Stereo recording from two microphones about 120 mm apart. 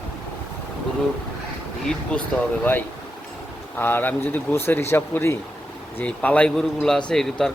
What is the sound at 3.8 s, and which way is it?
Speech, 15° left (ahead or behind).